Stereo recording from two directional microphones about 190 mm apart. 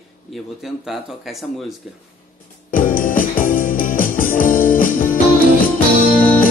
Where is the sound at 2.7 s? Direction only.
45° left (ahead or behind).